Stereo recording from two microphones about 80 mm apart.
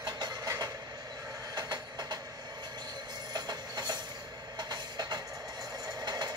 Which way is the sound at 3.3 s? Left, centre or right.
Right.